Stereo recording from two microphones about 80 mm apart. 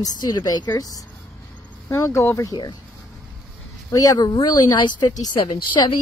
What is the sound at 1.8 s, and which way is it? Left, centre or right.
Speech, left.